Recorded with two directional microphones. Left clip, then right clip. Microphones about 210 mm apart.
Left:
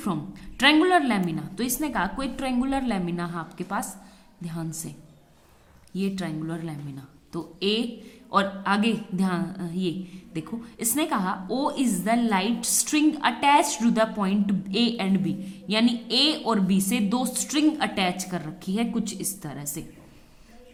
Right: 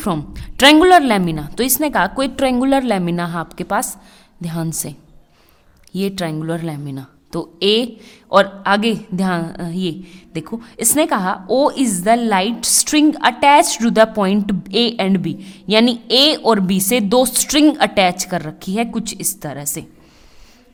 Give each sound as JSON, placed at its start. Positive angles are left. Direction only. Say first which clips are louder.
{"t": 0.0, "sound": "a woman's voice", "louder": "right 9 dB", "side_deg": -50}